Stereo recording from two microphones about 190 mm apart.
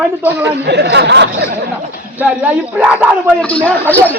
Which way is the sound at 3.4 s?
10° left (ahead or behind).